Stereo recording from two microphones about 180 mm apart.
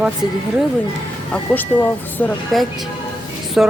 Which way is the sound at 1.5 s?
10° left (ahead or behind).